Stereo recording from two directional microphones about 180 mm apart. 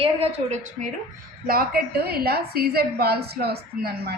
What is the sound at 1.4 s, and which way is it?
A woman's voice, 55° right (ahead or behind).